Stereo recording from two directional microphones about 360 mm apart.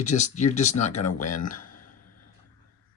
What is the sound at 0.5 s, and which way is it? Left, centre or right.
Speech, centre.